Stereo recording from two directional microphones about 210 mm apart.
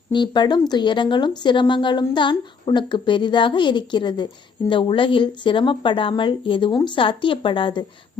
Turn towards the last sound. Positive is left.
turn(degrees=25)  # may be behind; listen again after turning